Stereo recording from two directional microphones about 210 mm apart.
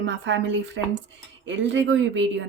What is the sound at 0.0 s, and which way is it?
Speech, 60° right (ahead or behind).